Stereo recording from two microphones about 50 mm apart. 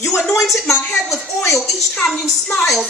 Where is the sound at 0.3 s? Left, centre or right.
Centre.